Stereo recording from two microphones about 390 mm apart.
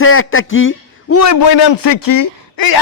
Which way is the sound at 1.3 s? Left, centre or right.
Left.